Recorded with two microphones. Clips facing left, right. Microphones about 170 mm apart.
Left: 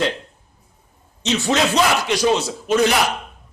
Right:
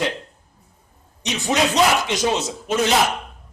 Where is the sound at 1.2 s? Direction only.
15° right (ahead or behind).